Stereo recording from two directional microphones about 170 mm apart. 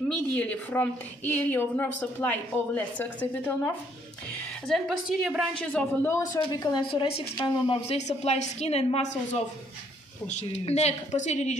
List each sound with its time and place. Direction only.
0.4 s a woman's voice: 10° left (ahead or behind)
6.3 s a woman's voice: 25° left (ahead or behind)
7.8 s a woman's voice: 40° left (ahead or behind)